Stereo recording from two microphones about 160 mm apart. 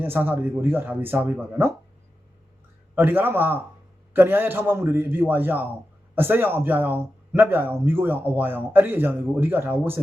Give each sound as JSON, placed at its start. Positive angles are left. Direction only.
{"t": 0.0, "sound": "speech", "side_deg": -15}
{"t": 2.9, "sound": "speech", "side_deg": -15}